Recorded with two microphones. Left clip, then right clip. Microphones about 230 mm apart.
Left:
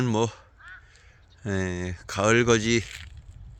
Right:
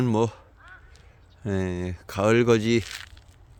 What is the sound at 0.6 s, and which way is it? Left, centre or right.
Crow, right.